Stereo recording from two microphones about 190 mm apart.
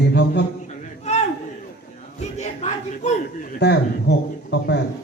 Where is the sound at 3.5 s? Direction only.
65° left (ahead or behind).